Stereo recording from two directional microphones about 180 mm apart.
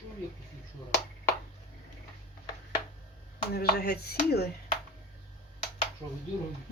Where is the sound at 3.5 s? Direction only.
60° left (ahead or behind).